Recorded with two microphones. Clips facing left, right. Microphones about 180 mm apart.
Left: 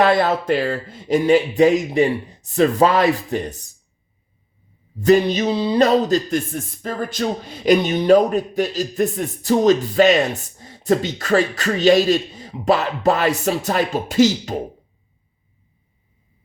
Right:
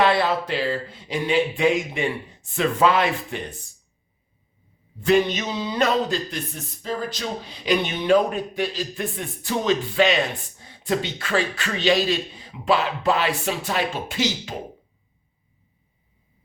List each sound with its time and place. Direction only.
0.0 s speech: 45° left (ahead or behind)
4.9 s speech: 40° left (ahead or behind)